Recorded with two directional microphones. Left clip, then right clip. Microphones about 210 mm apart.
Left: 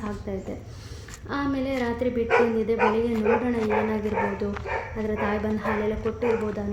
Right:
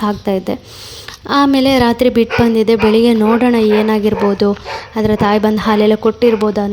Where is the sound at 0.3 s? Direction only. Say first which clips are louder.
Right 16 dB; 45° right (ahead or behind).